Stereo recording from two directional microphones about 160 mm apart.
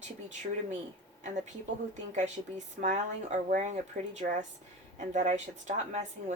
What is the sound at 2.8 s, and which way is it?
A woman's voice, 50° right (ahead or behind).